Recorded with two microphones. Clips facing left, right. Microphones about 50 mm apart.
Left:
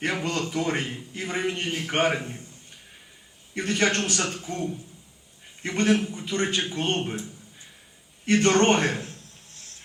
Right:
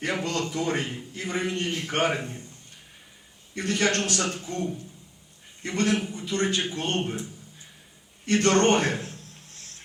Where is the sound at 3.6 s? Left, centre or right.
Centre.